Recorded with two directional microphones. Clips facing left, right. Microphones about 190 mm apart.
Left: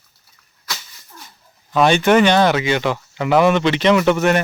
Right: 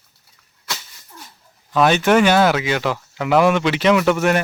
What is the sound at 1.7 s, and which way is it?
Speech, 5° right (ahead or behind).